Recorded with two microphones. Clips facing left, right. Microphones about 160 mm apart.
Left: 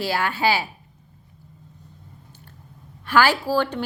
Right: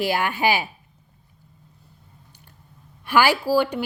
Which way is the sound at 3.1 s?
15° right (ahead or behind).